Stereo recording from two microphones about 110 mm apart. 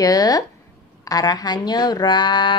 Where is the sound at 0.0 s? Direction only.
35° left (ahead or behind).